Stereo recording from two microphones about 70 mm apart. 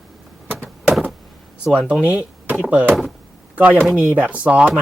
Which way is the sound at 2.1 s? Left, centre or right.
Centre.